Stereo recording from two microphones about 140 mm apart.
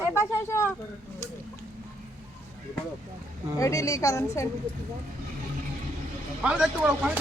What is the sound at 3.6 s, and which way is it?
Speech, 20° left (ahead or behind).